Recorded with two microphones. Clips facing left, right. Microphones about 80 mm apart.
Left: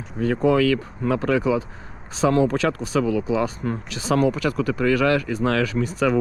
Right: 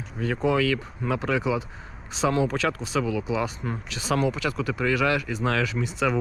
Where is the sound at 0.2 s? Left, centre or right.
Left.